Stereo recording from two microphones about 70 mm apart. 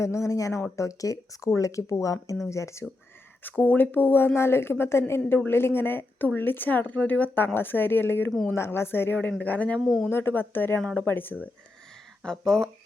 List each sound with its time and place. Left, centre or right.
0.0 s speech: left
3.6 s a woman's voice: left
9.8 s speech: centre
10.1 s speech: left
10.8 s speech: centre
11.0 s a woman's voice: left
12.2 s speech: centre